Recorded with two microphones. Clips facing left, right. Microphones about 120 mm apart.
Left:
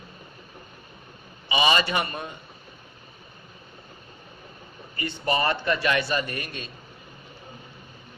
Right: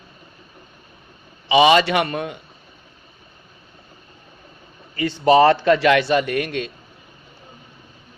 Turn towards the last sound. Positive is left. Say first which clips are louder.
# right 10 dB
turn(degrees=-90)